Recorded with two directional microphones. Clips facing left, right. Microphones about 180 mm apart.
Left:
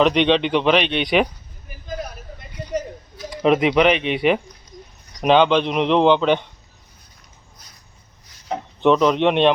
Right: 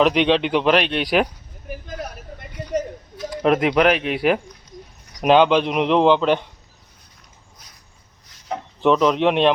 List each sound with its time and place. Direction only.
0.0 s speech: 5° right (ahead or behind)
1.7 s speech: 75° right (ahead or behind)
3.2 s speech: centre (ahead or behind)
8.8 s speech: centre (ahead or behind)